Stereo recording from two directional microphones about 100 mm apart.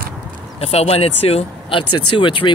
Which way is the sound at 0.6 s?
90° left.